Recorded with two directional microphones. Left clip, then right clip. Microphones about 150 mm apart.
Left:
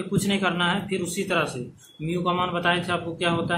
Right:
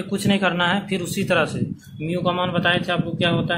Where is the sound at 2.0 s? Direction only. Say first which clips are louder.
Right 2 dB; 40° right (ahead or behind).